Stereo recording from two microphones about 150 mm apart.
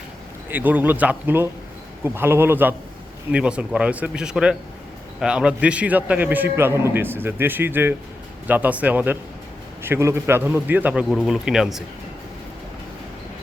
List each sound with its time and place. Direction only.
0.5 s a man's voice: 10° right (ahead or behind)